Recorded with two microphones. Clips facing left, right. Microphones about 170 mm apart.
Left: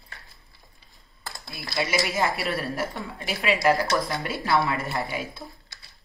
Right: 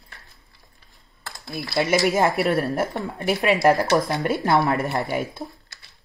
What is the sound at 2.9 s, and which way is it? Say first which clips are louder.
Speech: right 8 dB; 65° right (ahead or behind).